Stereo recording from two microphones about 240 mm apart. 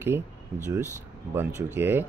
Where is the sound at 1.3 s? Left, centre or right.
Centre.